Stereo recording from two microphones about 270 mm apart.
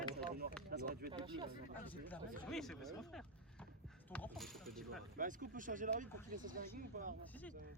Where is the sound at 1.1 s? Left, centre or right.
Centre.